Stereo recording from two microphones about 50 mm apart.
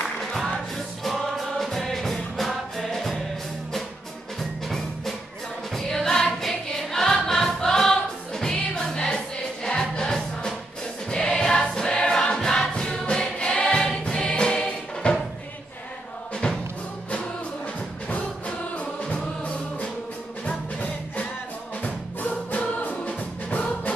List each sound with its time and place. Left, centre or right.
1.0 s music: centre
4.4 s music: centre
11.1 s choir: centre
19.0 s music: left